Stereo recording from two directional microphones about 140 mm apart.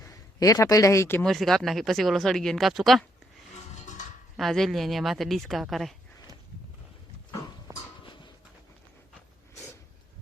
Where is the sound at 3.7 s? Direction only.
60° left (ahead or behind).